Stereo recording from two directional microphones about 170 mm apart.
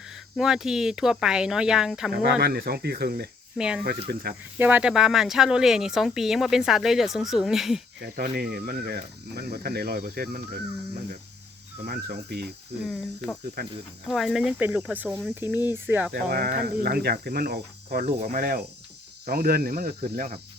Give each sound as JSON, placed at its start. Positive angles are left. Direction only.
{"t": 0.1, "sound": "speech", "side_deg": -5}
{"t": 2.4, "sound": "speech", "side_deg": -70}
{"t": 3.6, "sound": "speech", "side_deg": -5}
{"t": 4.1, "sound": "speech", "side_deg": -65}
{"t": 4.5, "sound": "speech", "side_deg": -10}
{"t": 8.0, "sound": "speech", "side_deg": -65}
{"t": 12.8, "sound": "speech", "side_deg": 0}
{"t": 13.6, "sound": "speech", "side_deg": -70}
{"t": 14.1, "sound": "speech", "side_deg": 0}
{"t": 16.1, "sound": "speech", "side_deg": -70}